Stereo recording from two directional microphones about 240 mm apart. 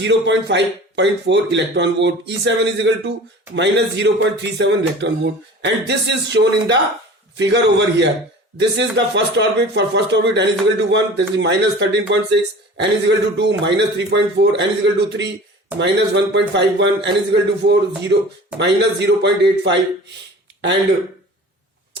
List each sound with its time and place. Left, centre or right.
0.0 s speech: right